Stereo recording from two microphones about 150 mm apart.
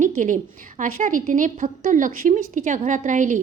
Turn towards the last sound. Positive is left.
turn(degrees=-60)  # may be behind; listen again after turning